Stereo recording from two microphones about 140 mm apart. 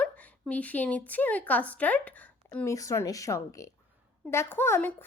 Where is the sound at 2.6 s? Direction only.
20° left (ahead or behind).